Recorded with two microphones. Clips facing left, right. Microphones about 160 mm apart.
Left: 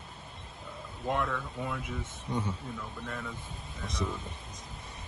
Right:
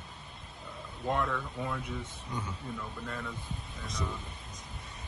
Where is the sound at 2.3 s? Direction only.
30° left (ahead or behind).